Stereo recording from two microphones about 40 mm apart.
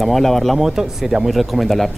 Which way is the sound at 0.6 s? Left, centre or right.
Centre.